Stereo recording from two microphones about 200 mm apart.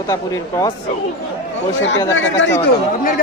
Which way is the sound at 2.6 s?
45° left (ahead or behind).